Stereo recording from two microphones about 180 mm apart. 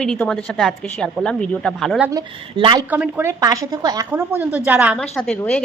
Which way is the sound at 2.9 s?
10° right (ahead or behind).